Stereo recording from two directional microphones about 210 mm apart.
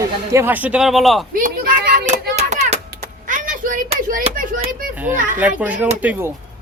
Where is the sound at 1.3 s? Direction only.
40° right (ahead or behind).